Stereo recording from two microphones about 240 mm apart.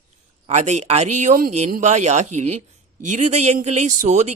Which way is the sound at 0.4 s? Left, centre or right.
Right.